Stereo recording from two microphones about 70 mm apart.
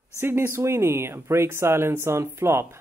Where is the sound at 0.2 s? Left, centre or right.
Right.